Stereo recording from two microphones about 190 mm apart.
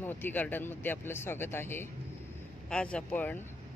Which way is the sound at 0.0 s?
10° left (ahead or behind).